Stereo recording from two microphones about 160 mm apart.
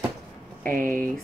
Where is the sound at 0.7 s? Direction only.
55° right (ahead or behind).